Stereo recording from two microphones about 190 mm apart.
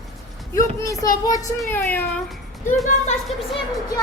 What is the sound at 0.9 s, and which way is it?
A child's voice, 20° left (ahead or behind).